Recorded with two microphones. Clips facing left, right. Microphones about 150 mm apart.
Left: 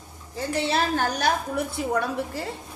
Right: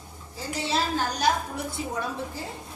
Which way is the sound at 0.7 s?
60° left (ahead or behind).